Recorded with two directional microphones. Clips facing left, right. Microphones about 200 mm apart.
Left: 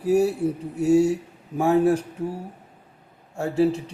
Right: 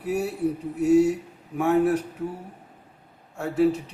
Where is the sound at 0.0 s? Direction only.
30° left (ahead or behind).